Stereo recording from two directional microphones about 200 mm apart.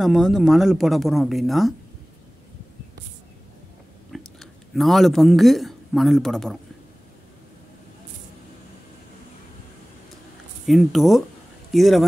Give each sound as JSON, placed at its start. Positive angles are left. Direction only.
{"t": 0.0, "sound": "speech", "side_deg": 0}
{"t": 4.1, "sound": "speech", "side_deg": 0}
{"t": 10.7, "sound": "speech", "side_deg": 0}